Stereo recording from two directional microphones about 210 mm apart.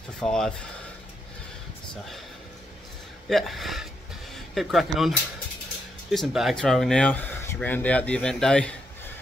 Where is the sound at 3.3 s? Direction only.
Centre (ahead or behind).